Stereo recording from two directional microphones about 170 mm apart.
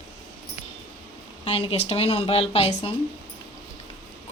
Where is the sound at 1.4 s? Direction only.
35° left (ahead or behind).